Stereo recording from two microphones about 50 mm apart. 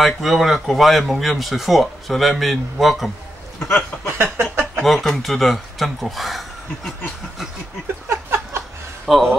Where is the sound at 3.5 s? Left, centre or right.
Centre.